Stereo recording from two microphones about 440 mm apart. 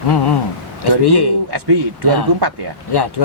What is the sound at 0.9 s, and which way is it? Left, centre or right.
Speech, left.